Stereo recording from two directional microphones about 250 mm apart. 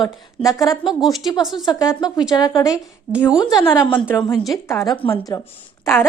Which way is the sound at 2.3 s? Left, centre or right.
Centre.